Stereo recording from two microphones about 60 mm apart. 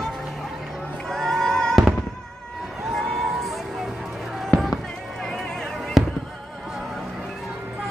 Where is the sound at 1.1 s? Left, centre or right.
Centre.